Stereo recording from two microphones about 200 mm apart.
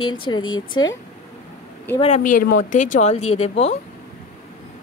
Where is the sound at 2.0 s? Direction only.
35° left (ahead or behind).